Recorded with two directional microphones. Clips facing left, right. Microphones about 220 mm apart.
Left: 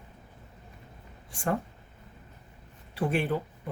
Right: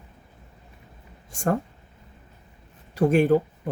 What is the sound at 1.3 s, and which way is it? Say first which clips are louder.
Speech: right 6 dB; 45° right (ahead or behind).